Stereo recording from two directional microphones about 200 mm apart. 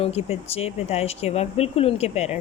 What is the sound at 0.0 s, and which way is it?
Speech, 30° left (ahead or behind).